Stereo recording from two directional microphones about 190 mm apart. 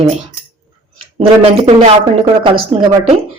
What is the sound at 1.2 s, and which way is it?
A woman's voice, 30° right (ahead or behind).